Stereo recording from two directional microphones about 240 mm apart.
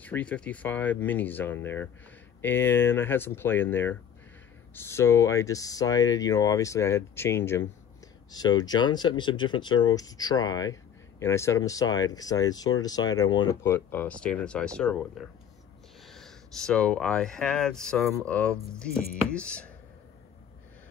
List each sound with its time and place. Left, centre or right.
0.0 s speech: centre